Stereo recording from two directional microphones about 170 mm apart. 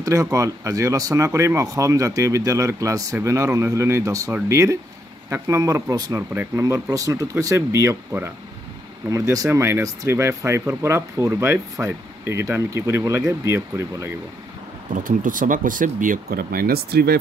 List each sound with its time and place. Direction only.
0.0 s speech: 20° right (ahead or behind)
14.9 s speech: 50° right (ahead or behind); by 17.2 s 65° right (ahead or behind)